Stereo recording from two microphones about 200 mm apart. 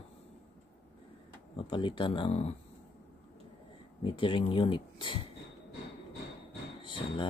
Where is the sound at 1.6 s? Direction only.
25° left (ahead or behind).